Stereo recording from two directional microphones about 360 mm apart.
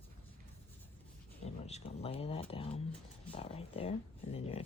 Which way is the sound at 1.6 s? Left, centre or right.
Centre.